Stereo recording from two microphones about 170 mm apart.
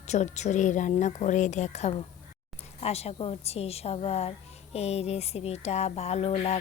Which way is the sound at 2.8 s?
35° left (ahead or behind).